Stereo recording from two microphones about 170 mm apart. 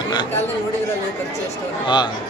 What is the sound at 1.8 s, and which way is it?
Speech, 25° left (ahead or behind).